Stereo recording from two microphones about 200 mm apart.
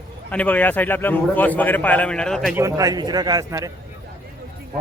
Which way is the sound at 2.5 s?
15° right (ahead or behind).